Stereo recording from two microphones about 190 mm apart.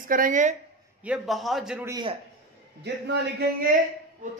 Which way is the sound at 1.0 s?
5° right (ahead or behind).